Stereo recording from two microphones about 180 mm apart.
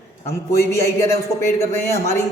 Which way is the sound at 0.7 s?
15° left (ahead or behind).